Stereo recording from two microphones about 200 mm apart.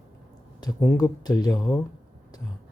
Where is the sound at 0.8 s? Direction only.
20° left (ahead or behind).